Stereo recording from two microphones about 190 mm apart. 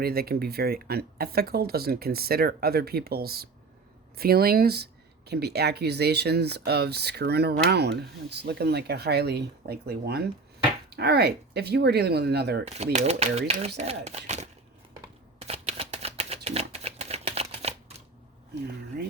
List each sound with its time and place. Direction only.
0.0 s speech: 55° right (ahead or behind)
12.6 s speech: 35° right (ahead or behind)
15.4 s a sound: 30° right (ahead or behind)
18.9 s speech: 55° right (ahead or behind)